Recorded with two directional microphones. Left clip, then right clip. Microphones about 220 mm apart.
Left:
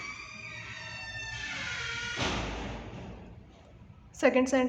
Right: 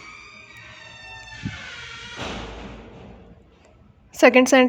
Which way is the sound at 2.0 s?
Centre (ahead or behind).